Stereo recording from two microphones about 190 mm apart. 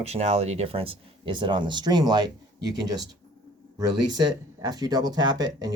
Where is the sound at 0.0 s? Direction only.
35° right (ahead or behind).